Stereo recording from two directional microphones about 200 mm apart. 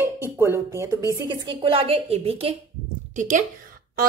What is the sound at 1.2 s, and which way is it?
A woman's voice, 25° right (ahead or behind).